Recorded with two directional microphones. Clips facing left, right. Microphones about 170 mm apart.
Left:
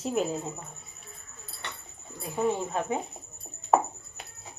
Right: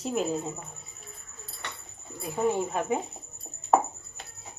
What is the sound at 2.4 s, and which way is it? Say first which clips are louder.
Speech: right 1 dB; 5° right (ahead or behind).